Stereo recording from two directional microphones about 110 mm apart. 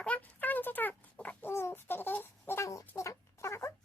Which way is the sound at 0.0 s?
10° left (ahead or behind).